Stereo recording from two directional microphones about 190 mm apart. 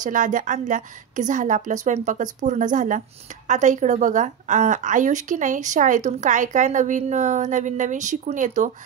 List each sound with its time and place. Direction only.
0.0 s a woman's voice: 45° right (ahead or behind)